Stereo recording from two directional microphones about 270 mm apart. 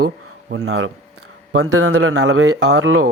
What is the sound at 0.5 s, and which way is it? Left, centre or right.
Speech, right.